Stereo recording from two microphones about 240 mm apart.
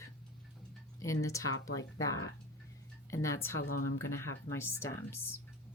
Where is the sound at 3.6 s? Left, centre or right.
Left.